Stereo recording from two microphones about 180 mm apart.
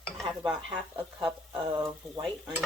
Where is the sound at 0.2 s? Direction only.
Centre (ahead or behind).